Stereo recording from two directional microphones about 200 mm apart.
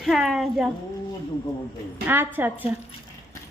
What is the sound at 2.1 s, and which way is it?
Speech, 10° right (ahead or behind).